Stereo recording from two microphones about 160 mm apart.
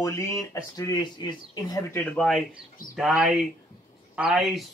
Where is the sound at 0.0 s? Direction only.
20° left (ahead or behind).